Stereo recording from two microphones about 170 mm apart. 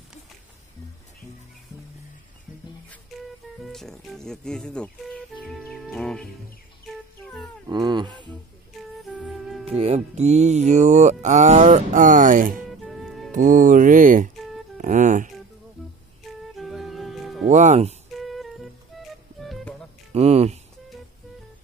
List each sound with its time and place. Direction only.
3.5 s speech: centre (ahead or behind)
7.6 s speech: 25° right (ahead or behind)
8.9 s music: centre (ahead or behind)
9.7 s music: 40° right (ahead or behind)
12.8 s music: centre (ahead or behind)
13.3 s music: 50° right (ahead or behind)
14.3 s music: centre (ahead or behind)
14.8 s speech: 45° right (ahead or behind)
16.5 s music: centre (ahead or behind)
17.5 s music: 45° right (ahead or behind)
18.1 s music: centre (ahead or behind)
20.1 s speech: 35° right (ahead or behind)